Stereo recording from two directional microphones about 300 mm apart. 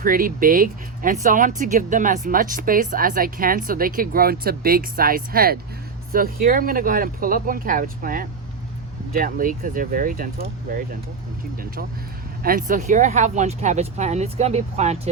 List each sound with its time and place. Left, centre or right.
0.0 s speech: right
12.4 s speech: right